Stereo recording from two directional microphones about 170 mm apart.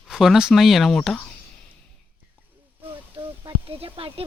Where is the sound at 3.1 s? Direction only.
30° right (ahead or behind).